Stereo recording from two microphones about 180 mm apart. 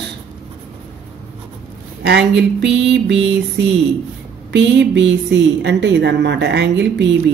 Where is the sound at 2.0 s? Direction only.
75° right (ahead or behind).